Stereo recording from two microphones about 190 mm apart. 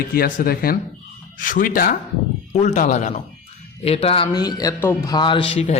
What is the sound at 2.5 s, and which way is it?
Speech, 35° left (ahead or behind).